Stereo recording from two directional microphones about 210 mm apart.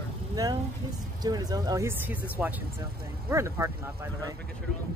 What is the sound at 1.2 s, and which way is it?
Speech, 20° right (ahead or behind).